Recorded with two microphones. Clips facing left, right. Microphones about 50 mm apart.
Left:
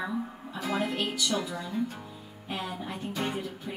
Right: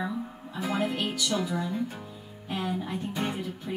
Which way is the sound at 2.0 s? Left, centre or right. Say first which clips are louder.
Right 1 dB; centre.